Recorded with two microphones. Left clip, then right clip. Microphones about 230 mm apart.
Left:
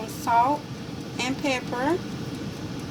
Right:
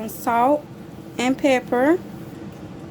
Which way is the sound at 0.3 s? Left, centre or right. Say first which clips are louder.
Right 3 dB; right.